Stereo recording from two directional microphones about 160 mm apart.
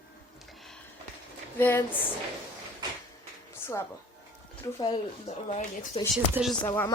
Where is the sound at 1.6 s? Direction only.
15° left (ahead or behind).